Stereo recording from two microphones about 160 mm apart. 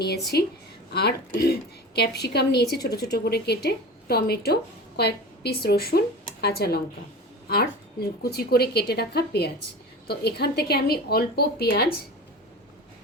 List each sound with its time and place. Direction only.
0.3 s a woman's voice: 90° left
2.0 s a woman's voice: 90° left
4.9 s a woman's voice: 90° left